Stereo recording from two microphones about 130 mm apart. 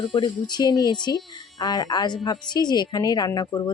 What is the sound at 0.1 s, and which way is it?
A woman's voice, 35° left (ahead or behind).